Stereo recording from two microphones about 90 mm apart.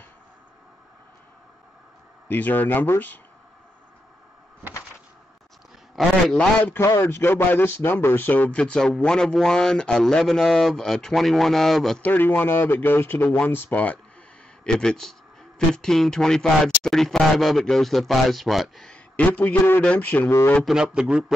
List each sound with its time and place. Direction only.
2.2 s speech: 20° left (ahead or behind)
6.0 s a sound: centre (ahead or behind)
6.3 s speech: 15° left (ahead or behind)
12.0 s speech: 20° left (ahead or behind)
14.6 s speech: 10° left (ahead or behind)
19.1 s speech: 15° left (ahead or behind)
20.2 s speech: 30° left (ahead or behind)
20.6 s speech: 10° right (ahead or behind)